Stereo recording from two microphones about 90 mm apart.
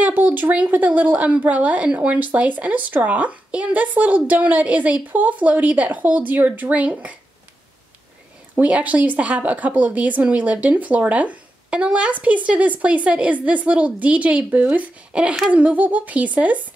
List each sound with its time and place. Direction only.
0.0 s speech: 20° right (ahead or behind)
8.5 s speech: 15° right (ahead or behind)